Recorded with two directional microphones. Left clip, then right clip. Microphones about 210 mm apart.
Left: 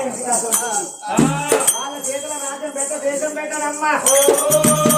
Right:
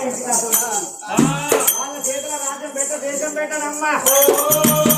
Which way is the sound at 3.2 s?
Centre (ahead or behind).